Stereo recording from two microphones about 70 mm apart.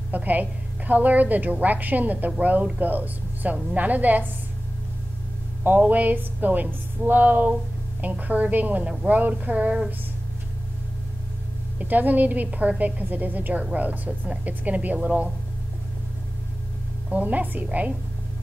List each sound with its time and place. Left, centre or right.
0.1 s a woman's voice: right
5.6 s a woman's voice: right
11.8 s a woman's voice: right
17.1 s a woman's voice: right